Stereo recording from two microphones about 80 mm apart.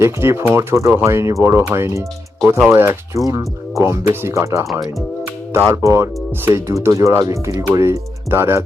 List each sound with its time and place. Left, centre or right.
0.0 s speech: right
3.2 s speech: right
4.0 s speech: right
5.6 s speech: right